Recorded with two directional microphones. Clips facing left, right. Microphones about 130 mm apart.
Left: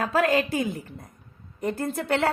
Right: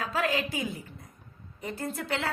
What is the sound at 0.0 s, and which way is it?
A woman's voice, 55° left (ahead or behind).